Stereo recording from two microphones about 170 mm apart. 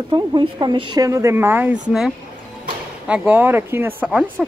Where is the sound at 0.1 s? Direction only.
25° right (ahead or behind).